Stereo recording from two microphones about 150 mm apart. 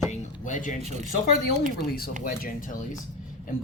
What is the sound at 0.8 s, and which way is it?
Speech, 50° right (ahead or behind).